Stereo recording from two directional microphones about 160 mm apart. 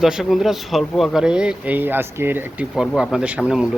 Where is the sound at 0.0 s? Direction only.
5° right (ahead or behind).